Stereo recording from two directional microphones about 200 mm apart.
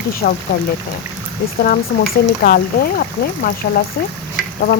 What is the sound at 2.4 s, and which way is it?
A woman's voice, 50° left (ahead or behind).